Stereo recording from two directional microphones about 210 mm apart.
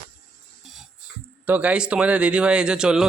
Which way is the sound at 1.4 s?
5° right (ahead or behind).